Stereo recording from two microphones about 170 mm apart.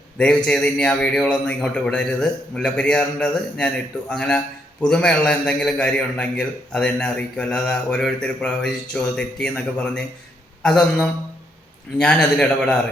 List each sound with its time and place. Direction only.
0.2 s a man's voice: 5° left (ahead or behind)